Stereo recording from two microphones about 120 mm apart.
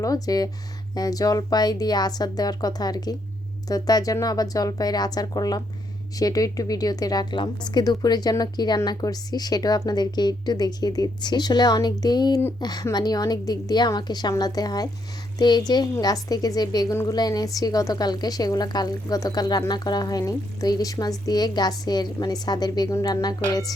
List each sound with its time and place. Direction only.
0.0 s a woman's voice: 30° left (ahead or behind)